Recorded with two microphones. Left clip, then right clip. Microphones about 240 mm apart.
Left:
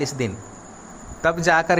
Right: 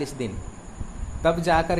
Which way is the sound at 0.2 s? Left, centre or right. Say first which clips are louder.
Left 5 dB; centre.